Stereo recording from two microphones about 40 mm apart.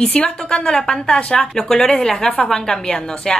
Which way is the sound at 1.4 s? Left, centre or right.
Centre.